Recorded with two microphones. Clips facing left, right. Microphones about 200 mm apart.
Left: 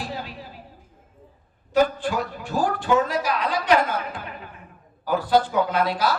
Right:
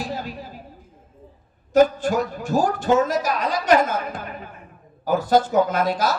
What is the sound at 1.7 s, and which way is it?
A woman's voice, 45° right (ahead or behind).